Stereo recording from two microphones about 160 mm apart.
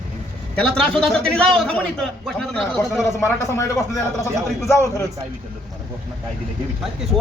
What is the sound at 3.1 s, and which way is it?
Speech, 15° left (ahead or behind).